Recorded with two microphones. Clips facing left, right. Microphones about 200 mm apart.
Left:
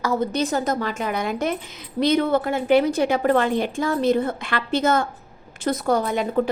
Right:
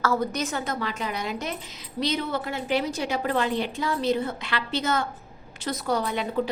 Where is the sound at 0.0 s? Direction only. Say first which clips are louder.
Left 3 dB; 20° left (ahead or behind).